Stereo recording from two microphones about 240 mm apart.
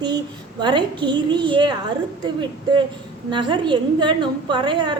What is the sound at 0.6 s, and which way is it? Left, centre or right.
A woman's voice, centre.